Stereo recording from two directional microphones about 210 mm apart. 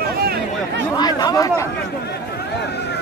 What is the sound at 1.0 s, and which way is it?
Speech, 20° left (ahead or behind).